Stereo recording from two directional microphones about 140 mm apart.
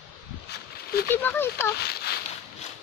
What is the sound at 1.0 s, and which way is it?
Speech, 15° left (ahead or behind).